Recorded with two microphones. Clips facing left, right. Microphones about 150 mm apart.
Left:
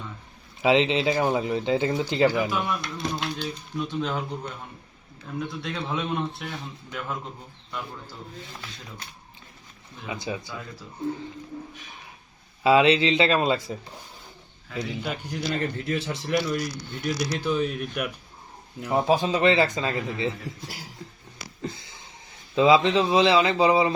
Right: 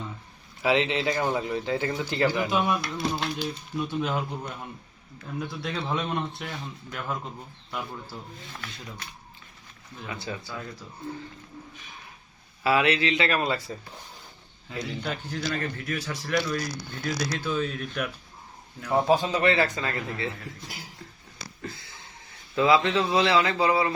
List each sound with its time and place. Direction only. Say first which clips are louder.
0.6 s speech: left 3 dB; 20° left (ahead or behind)
2.5 s speech: right 3 dB; 20° right (ahead or behind)
2.8 s speech: right 1 dB; 5° right (ahead or behind)
5.6 s a man's voice: right 2 dB; centre (ahead or behind)
10.1 s speech: left 4 dB; 15° left (ahead or behind)
12.6 s speech: left 5 dB; 20° left (ahead or behind)
14.8 s speech: left 2 dB; 10° left (ahead or behind)
21.6 s a sound: left 5 dB; 20° left (ahead or behind)
22.5 s speech: left 3 dB; 20° left (ahead or behind)